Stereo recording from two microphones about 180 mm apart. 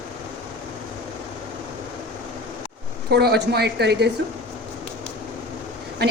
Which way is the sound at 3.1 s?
65° right (ahead or behind).